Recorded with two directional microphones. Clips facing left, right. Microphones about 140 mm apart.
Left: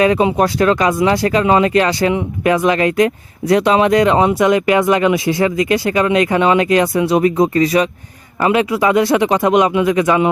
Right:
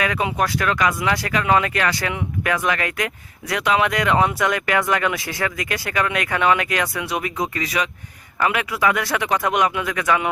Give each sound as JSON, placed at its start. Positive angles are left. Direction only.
{"t": 0.0, "sound": "speech", "side_deg": 30}